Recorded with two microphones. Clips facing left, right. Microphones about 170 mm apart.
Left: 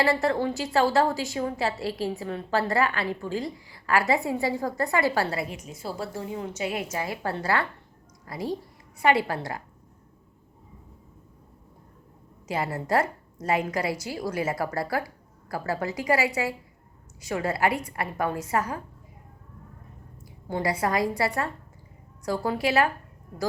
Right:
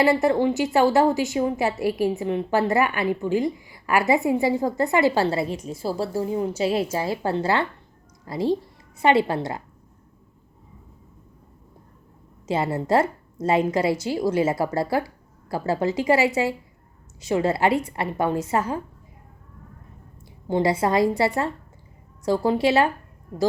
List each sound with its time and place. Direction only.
0.0 s a woman's voice: 25° right (ahead or behind)
12.5 s a woman's voice: 25° right (ahead or behind)
20.5 s a woman's voice: 25° right (ahead or behind)